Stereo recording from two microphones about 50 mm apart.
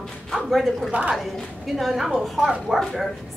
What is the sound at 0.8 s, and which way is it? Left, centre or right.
Speech, right.